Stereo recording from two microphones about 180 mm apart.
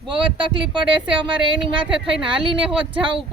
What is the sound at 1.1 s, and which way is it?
Speech, 30° right (ahead or behind).